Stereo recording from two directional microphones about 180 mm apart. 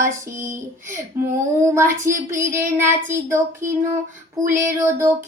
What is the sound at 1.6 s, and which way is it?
Music, 15° right (ahead or behind).